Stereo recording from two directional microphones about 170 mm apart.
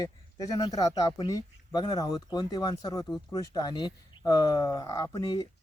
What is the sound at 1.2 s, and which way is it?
Speech, 25° left (ahead or behind).